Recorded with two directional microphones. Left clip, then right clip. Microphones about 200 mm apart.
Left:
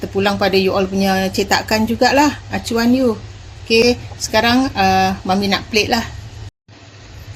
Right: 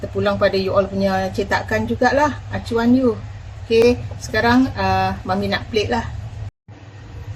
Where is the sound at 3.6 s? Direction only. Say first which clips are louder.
Left 1 dB; 35° left (ahead or behind).